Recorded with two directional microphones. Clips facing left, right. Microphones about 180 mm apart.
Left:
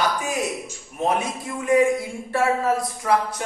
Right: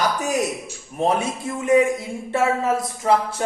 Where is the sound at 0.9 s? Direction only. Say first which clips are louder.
Right 2 dB; 30° right (ahead or behind).